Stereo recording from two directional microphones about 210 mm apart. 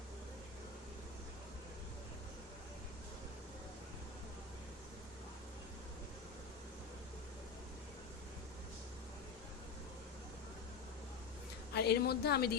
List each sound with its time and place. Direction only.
11.7 s a woman's voice: 50° left (ahead or behind)